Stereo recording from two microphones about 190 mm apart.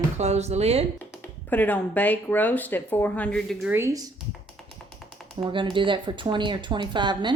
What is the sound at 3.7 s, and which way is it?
Speech, 15° right (ahead or behind).